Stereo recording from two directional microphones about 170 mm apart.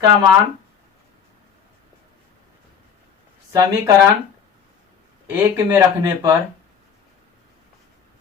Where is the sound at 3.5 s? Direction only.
20° right (ahead or behind).